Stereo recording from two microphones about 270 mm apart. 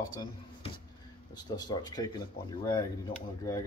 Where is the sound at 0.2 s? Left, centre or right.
Centre.